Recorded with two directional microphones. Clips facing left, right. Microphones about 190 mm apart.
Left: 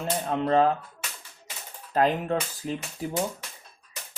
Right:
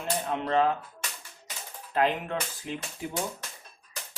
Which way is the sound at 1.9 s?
40° left (ahead or behind).